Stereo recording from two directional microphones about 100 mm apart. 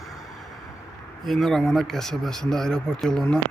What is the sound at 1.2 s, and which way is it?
Speech, centre (ahead or behind).